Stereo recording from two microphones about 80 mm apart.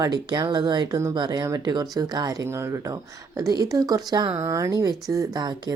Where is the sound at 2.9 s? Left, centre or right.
Right.